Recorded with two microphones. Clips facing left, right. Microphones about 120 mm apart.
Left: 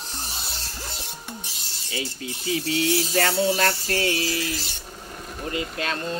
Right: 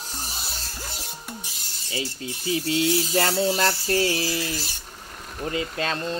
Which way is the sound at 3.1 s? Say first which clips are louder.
Left 2 dB; 30° right (ahead or behind).